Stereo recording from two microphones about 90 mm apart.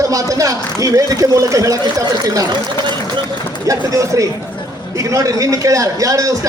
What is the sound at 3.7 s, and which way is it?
A man's voice, 40° right (ahead or behind).